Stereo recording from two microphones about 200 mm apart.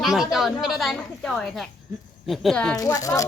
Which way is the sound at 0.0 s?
Centre (ahead or behind).